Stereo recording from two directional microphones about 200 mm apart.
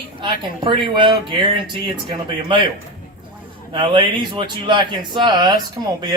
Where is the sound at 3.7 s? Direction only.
25° right (ahead or behind).